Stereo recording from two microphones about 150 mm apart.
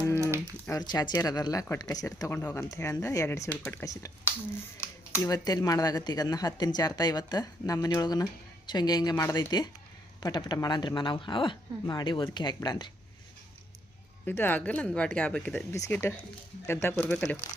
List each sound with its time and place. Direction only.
0.7 s speech: 25° left (ahead or behind)
14.3 s speech: 15° left (ahead or behind)